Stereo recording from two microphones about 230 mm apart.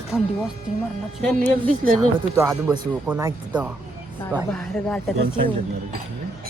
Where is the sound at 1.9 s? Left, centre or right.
Centre.